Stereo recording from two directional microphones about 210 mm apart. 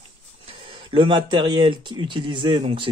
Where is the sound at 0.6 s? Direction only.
25° right (ahead or behind).